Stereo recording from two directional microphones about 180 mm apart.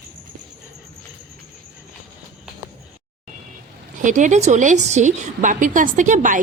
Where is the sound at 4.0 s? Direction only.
45° right (ahead or behind).